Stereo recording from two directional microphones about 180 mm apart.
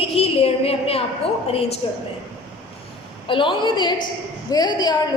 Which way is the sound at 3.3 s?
30° left (ahead or behind).